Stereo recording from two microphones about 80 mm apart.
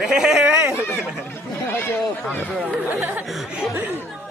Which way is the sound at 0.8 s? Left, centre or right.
Left.